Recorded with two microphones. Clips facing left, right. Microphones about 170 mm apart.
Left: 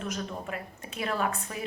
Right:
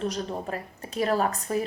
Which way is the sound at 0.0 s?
35° right (ahead or behind).